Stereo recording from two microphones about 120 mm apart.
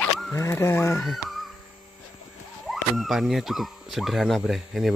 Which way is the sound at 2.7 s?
Centre (ahead or behind).